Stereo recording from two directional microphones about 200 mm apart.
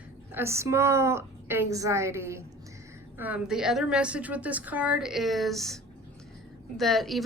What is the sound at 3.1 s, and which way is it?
A woman's voice, 10° right (ahead or behind).